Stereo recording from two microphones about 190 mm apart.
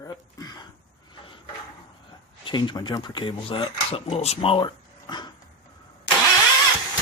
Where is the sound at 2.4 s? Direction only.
25° left (ahead or behind).